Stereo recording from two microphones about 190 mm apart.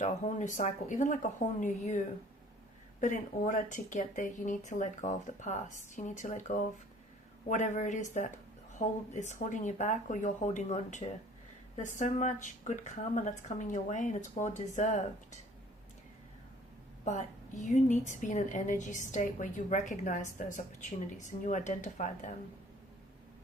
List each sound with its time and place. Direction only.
0.0 s speech: 40° left (ahead or behind)
3.0 s speech: 45° left (ahead or behind)
17.1 s speech: 40° left (ahead or behind)